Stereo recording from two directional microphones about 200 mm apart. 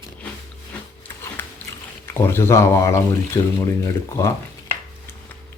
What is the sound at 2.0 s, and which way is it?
Speech, 10° left (ahead or behind).